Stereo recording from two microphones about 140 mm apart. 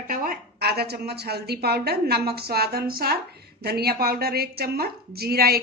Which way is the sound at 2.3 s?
90° right.